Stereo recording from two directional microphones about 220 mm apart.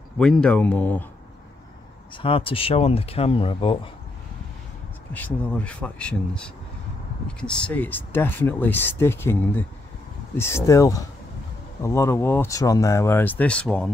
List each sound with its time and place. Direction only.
0.2 s speech: 5° left (ahead or behind)
2.1 s speech: 25° left (ahead or behind)
5.1 s speech: 5° left (ahead or behind)